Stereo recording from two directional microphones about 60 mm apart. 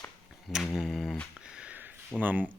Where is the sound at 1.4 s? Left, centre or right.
Centre.